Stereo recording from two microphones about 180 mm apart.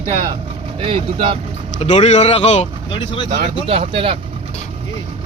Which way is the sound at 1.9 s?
35° left (ahead or behind).